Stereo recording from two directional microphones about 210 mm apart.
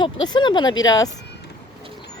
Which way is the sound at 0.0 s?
20° left (ahead or behind).